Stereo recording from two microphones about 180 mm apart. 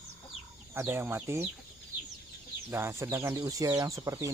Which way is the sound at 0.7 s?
10° right (ahead or behind).